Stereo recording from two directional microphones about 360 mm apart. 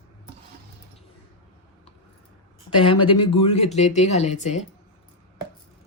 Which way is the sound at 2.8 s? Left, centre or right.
Centre.